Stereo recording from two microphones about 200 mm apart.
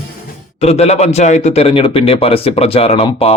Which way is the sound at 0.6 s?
30° left (ahead or behind).